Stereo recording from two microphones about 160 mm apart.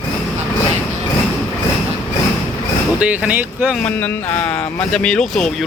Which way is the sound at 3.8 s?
10° left (ahead or behind).